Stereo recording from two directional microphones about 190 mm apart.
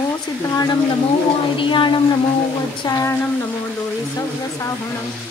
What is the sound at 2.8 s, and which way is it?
Speech, 20° left (ahead or behind).